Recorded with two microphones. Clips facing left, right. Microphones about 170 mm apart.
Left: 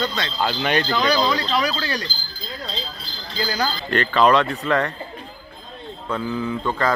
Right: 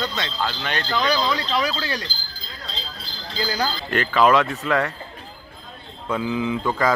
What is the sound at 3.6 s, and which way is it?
Speech, 10° right (ahead or behind).